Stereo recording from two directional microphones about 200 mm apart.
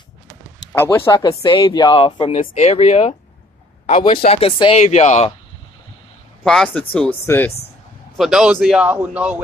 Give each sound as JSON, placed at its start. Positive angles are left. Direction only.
{"t": 0.7, "sound": "a man's voice", "side_deg": 15}
{"t": 6.4, "sound": "speech", "side_deg": 0}
{"t": 8.2, "sound": "a man's voice", "side_deg": 0}